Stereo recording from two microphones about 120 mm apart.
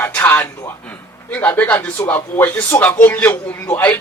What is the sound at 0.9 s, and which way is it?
A man's voice, 10° left (ahead or behind).